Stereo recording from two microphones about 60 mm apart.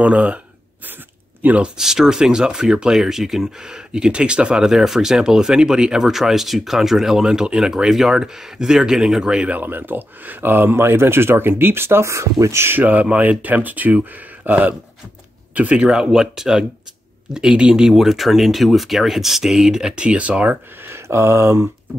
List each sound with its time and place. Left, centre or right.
0.0 s speech: right
1.4 s speech: right
1.8 s speech: centre
9.5 s speech: right
12.1 s speech: right
12.6 s speech: right
20.8 s speech: right